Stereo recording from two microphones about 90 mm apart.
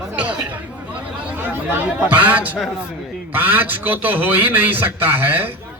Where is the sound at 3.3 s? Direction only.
20° right (ahead or behind).